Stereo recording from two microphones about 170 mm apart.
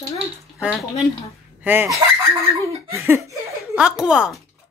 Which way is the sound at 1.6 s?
10° right (ahead or behind).